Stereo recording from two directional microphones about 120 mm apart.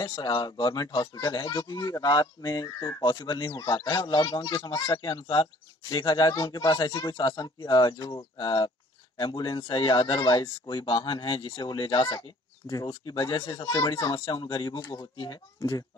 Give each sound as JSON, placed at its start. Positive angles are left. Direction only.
{"t": 0.0, "sound": "speech", "side_deg": 45}